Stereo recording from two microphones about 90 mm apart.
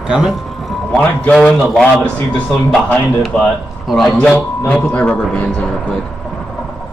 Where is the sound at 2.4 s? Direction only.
15° left (ahead or behind).